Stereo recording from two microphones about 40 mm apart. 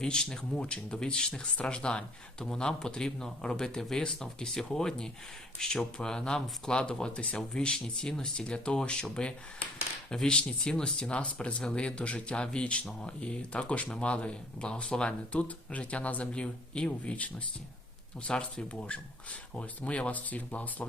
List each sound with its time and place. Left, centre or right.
0.0 s speech: centre; by 16.2 s left
16.2 s speech: left